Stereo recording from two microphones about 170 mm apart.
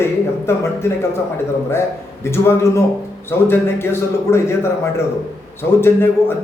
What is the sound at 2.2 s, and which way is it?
A man's voice, 15° left (ahead or behind).